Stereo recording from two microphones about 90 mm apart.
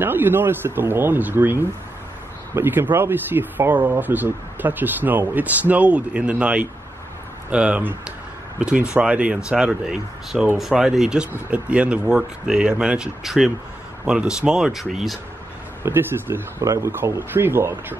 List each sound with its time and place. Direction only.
0.0 s speech: 20° right (ahead or behind); by 15.1 s 5° right (ahead or behind)
15.8 s speech: 25° right (ahead or behind)
16.6 s speech: 35° right (ahead or behind)